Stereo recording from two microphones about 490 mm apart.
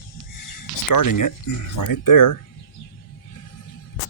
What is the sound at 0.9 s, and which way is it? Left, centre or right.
Speech, left.